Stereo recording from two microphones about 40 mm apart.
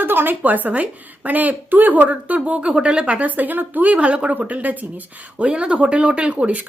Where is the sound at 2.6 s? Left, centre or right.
Right.